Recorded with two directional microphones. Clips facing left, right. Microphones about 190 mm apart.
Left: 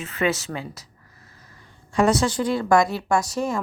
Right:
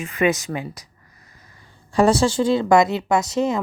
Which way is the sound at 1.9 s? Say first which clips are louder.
Right 3 dB; 30° right (ahead or behind).